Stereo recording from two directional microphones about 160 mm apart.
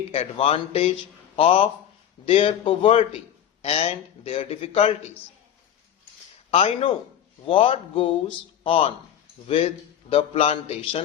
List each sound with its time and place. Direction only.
0.1 s a man's voice: 35° left (ahead or behind)
6.5 s a man's voice: 40° left (ahead or behind)